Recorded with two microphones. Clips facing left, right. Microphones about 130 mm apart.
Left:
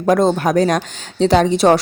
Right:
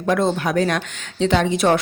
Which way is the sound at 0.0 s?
40° left (ahead or behind).